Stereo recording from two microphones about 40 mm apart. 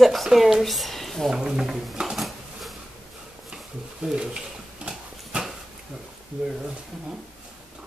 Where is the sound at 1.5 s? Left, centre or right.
Centre.